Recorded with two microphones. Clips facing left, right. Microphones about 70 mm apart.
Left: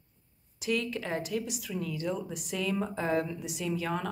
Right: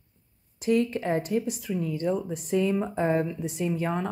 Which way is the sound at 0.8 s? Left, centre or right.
Right.